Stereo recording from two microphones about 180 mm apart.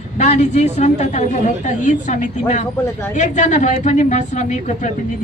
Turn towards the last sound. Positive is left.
turn(degrees=40)  # may be behind; listen again after turning